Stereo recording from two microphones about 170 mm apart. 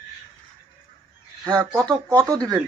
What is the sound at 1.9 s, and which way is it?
Speech, 20° right (ahead or behind).